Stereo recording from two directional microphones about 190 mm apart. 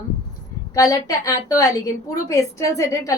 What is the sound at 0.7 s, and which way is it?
A woman's voice, 20° left (ahead or behind).